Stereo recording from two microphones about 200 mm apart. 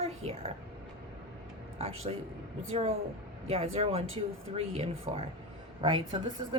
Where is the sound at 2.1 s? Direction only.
30° right (ahead or behind).